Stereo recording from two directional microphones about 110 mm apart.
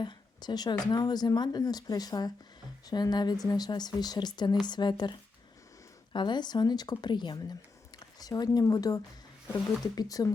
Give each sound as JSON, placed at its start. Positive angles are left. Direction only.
{"t": 0.0, "sound": "speech", "side_deg": 45}
{"t": 6.1, "sound": "speech", "side_deg": 45}